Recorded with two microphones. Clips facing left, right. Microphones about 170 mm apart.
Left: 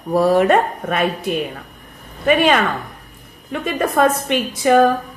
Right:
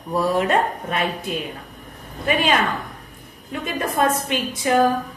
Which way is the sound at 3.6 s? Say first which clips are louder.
Left 5 dB; 65° left (ahead or behind).